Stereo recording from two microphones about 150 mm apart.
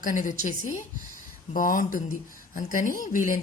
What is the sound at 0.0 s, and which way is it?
Speech, 60° left (ahead or behind).